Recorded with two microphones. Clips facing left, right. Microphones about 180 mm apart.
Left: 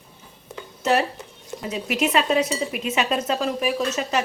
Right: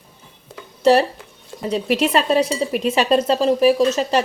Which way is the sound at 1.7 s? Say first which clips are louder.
Right 4 dB; 35° right (ahead or behind).